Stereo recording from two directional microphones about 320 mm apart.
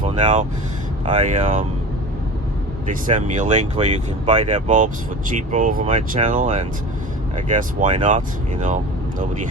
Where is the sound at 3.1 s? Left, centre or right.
Right.